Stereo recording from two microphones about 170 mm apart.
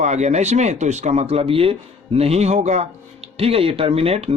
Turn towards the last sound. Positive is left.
turn(degrees=-35)  # may be behind; listen again after turning